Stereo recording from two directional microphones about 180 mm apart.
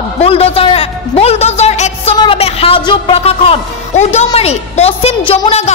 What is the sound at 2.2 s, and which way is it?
A woman's voice, 30° left (ahead or behind).